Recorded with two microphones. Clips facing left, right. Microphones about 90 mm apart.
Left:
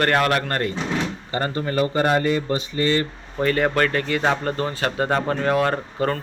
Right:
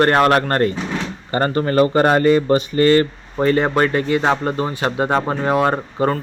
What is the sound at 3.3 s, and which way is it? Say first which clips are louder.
Speech: right 4 dB; 25° right (ahead or behind).